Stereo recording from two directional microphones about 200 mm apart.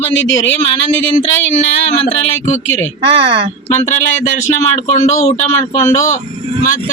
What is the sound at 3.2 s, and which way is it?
Speech, 25° right (ahead or behind).